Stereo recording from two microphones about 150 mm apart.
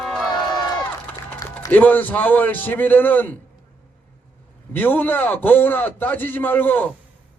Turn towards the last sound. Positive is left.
turn(degrees=10)  # may be behind; listen again after turning